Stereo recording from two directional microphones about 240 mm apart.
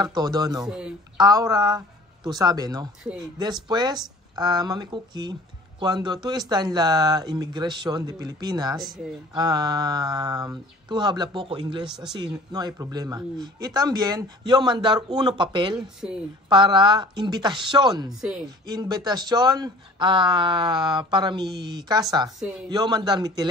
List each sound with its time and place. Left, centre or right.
0.0 s speech: centre
0.7 s speech: centre
1.1 s speech: centre
8.7 s speech: centre
9.3 s speech: centre
16.0 s speech: centre
16.4 s speech: centre